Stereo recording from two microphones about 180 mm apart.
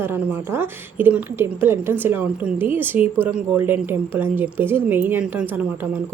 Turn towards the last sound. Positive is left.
turn(degrees=-10)  # may be behind; listen again after turning